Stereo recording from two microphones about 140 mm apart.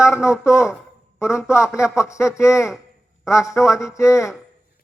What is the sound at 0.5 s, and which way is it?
Speech, 20° left (ahead or behind).